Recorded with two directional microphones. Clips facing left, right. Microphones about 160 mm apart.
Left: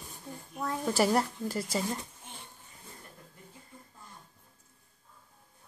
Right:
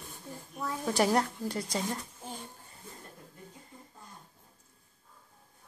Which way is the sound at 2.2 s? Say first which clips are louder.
Right 7 dB; 35° right (ahead or behind).